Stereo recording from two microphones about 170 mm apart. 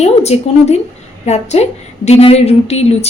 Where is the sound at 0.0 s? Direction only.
40° left (ahead or behind).